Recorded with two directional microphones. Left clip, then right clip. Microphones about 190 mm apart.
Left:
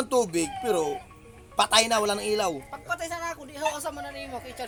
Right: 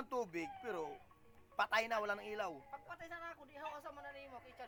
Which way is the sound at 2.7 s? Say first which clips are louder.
Left 18 dB; 90° left.